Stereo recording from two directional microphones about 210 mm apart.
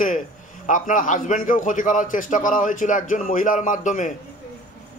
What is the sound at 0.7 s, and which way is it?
A man's voice, 40° left (ahead or behind).